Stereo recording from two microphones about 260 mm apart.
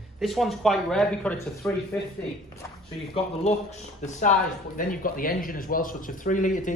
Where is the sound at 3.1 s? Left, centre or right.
Left.